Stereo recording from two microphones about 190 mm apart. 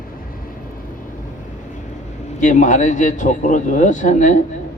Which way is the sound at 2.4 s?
40° left (ahead or behind).